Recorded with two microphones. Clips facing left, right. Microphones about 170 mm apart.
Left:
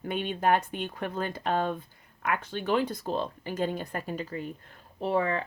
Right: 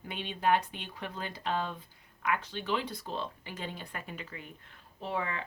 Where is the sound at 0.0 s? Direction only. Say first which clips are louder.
Left 4 dB; 50° left (ahead or behind).